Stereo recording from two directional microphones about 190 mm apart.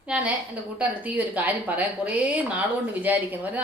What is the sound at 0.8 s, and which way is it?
A woman's voice, 5° right (ahead or behind).